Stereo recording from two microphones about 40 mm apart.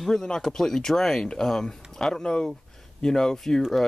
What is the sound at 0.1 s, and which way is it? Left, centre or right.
Speech, centre.